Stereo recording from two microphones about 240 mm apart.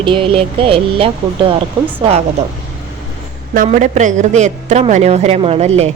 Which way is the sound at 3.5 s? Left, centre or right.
Right.